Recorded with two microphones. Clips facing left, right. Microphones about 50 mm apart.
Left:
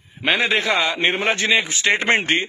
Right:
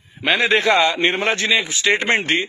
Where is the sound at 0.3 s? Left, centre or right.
Centre.